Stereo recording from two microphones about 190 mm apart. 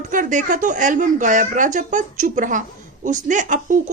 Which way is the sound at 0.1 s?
45° right (ahead or behind).